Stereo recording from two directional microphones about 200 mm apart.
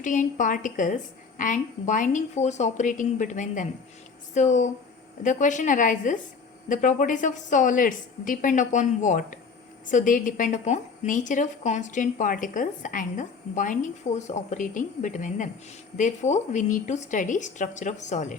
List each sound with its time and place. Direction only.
0.0 s a woman's voice: 40° left (ahead or behind)